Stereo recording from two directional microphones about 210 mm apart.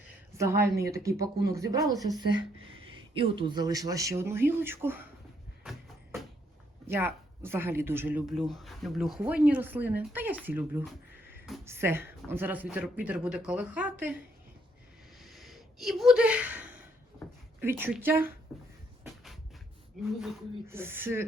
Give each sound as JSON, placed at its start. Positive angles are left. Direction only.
{"t": 0.3, "sound": "speech", "side_deg": -15}
{"t": 6.8, "sound": "speech", "side_deg": -10}
{"t": 15.2, "sound": "a sound", "side_deg": 0}
{"t": 17.6, "sound": "speech", "side_deg": -10}
{"t": 19.0, "sound": "a sound", "side_deg": 0}
{"t": 20.7, "sound": "speech", "side_deg": -10}